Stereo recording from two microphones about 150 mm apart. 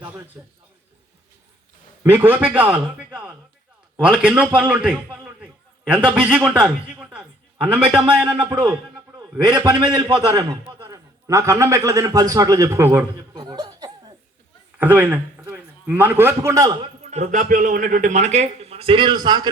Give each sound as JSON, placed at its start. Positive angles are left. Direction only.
{"t": 2.2, "sound": "a man's voice", "side_deg": -10}
{"t": 4.7, "sound": "a sound", "side_deg": -10}
{"t": 6.2, "sound": "a man's voice", "side_deg": -15}
{"t": 9.1, "sound": "a man's voice", "side_deg": -25}
{"t": 10.8, "sound": "a man's voice", "side_deg": -20}
{"t": 13.3, "sound": "speech", "side_deg": -25}
{"t": 14.8, "sound": "a man's voice", "side_deg": -10}
{"t": 17.0, "sound": "speech", "side_deg": -50}